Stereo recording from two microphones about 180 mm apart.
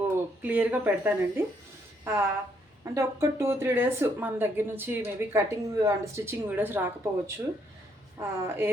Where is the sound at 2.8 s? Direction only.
15° right (ahead or behind).